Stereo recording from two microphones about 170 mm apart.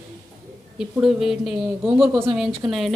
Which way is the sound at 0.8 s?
5° right (ahead or behind).